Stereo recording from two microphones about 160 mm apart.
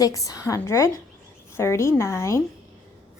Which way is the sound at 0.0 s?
20° left (ahead or behind).